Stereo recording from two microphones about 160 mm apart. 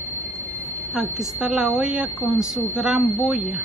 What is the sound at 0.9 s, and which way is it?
A man's voice, 5° right (ahead or behind).